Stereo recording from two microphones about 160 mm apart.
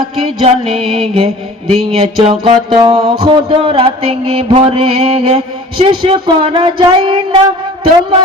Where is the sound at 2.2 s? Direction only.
30° right (ahead or behind).